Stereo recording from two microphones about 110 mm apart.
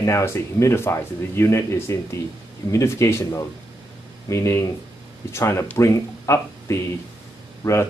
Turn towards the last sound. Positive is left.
turn(degrees=25)  # may be behind; listen again after turning